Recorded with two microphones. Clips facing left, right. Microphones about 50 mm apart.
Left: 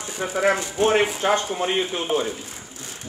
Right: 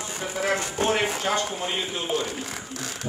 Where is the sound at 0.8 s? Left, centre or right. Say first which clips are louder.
Left 5 dB; left.